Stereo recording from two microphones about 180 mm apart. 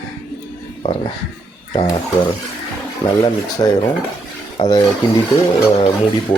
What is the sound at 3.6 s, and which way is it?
Speech, 25° left (ahead or behind).